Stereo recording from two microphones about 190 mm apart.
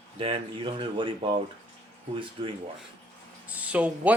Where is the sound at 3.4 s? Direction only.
5° right (ahead or behind).